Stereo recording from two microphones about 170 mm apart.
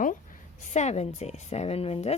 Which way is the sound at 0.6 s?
40° left (ahead or behind).